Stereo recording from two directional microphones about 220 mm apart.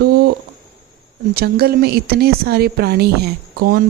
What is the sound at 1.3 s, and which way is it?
Speech, 45° right (ahead or behind).